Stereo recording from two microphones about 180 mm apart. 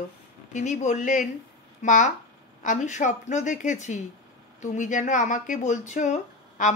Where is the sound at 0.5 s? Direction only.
40° left (ahead or behind).